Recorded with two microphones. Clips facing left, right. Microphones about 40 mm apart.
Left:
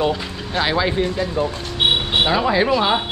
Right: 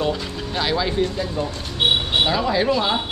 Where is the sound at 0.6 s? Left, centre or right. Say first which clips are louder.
Left 2 dB; centre.